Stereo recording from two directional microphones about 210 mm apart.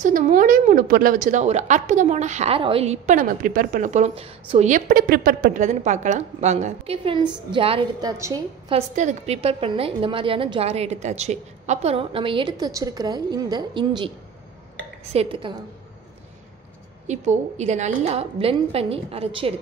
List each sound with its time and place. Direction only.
0.0 s a woman's voice: 40° right (ahead or behind); by 8.7 s 15° right (ahead or behind)
8.7 s a woman's voice: 35° right (ahead or behind)
15.1 s a woman's voice: 25° right (ahead or behind)
17.1 s a woman's voice: 35° right (ahead or behind)